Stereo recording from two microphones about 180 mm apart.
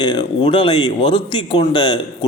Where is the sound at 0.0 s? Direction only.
25° left (ahead or behind).